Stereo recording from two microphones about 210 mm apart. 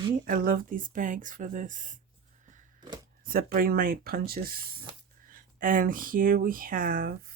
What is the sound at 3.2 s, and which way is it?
Speech, 45° right (ahead or behind).